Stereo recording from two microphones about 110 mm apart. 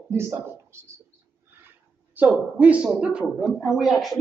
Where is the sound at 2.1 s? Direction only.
15° right (ahead or behind).